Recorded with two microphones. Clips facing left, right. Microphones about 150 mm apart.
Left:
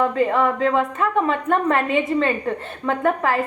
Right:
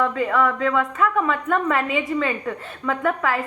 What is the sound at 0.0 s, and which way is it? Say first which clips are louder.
A woman's voice: left 2 dB; 40° left (ahead or behind).